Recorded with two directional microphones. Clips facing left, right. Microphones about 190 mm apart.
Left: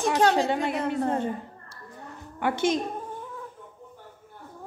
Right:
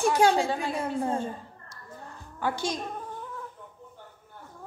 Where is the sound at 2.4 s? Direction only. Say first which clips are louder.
Left 5 dB; 20° left (ahead or behind).